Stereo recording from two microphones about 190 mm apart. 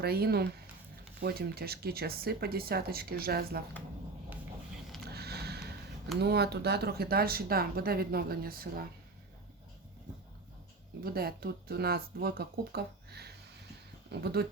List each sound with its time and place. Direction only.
0.0 s speech: 55° right (ahead or behind)
5.0 s a sound: 55° right (ahead or behind)
6.1 s speech: 60° right (ahead or behind)
11.0 s speech: 55° right (ahead or behind)